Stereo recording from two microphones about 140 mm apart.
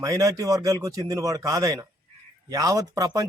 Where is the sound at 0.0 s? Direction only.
25° right (ahead or behind).